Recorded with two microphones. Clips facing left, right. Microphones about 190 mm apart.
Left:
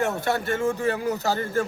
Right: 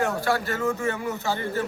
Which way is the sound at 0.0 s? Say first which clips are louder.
Even; 25° left (ahead or behind).